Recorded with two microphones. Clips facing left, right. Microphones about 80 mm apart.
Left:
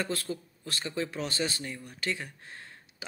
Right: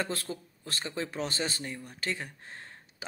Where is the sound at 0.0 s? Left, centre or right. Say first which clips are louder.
Left 1 dB; right.